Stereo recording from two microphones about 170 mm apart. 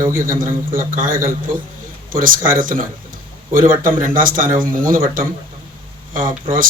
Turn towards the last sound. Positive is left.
turn(degrees=-55)  # may be behind; listen again after turning